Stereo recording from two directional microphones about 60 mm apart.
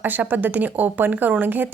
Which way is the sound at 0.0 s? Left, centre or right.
Right.